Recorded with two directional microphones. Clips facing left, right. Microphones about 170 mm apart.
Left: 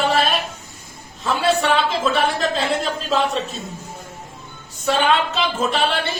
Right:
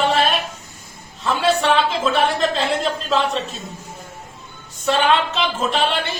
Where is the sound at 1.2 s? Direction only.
Centre (ahead or behind).